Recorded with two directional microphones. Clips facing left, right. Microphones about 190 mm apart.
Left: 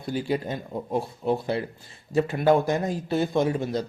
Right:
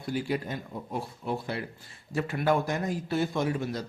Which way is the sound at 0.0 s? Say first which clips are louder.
Left 3 dB; 25° left (ahead or behind).